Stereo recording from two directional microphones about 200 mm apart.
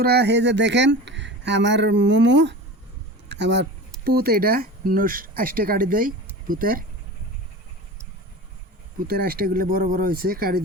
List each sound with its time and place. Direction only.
0.0 s speech: 55° right (ahead or behind)
9.0 s speech: 50° right (ahead or behind)